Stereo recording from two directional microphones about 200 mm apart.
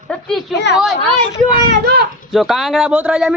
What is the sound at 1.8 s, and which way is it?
Speech, 55° right (ahead or behind).